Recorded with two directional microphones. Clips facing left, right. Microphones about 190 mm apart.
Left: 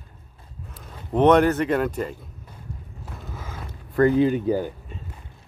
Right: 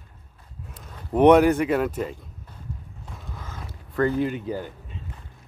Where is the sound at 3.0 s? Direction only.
Centre (ahead or behind).